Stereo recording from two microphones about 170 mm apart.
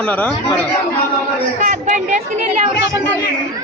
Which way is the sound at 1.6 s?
45° right (ahead or behind).